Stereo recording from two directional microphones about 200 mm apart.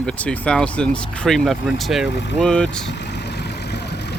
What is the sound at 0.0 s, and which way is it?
Speech, 5° left (ahead or behind).